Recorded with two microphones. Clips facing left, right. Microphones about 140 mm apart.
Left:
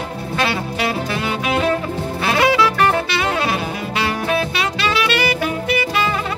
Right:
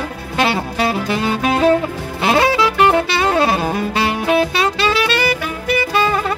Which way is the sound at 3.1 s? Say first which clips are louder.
Right 4 dB; 35° right (ahead or behind).